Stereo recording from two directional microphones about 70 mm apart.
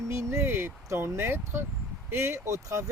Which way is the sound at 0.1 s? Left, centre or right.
Right.